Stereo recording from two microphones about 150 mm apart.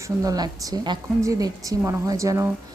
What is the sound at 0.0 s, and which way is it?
A woman's voice, 25° right (ahead or behind).